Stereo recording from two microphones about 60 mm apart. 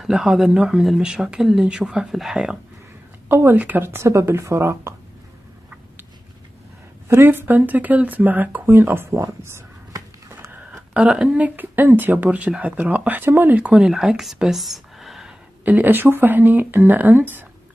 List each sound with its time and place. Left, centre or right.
0.0 s speech: centre
3.3 s a woman's voice: right
3.5 s speech: right
7.1 s speech: right
8.7 s speech: right
9.9 s a sound: right
10.9 s speech: centre; by 13.6 s right
13.7 s speech: centre
15.6 s speech: right